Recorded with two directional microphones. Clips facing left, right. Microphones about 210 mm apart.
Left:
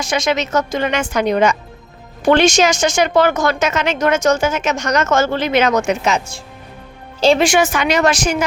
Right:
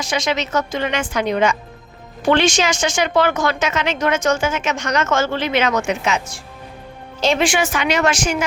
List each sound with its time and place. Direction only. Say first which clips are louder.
0.0 s a woman's voice: left 3 dB; 50° left (ahead or behind)